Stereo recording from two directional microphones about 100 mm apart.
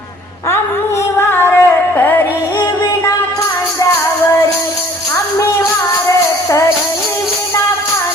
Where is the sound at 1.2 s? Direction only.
20° left (ahead or behind).